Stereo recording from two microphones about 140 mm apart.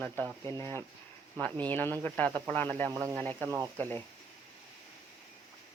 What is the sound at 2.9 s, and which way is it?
Speech, 25° right (ahead or behind).